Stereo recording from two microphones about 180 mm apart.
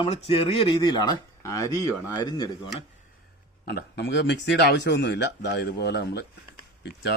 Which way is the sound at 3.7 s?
65° left (ahead or behind).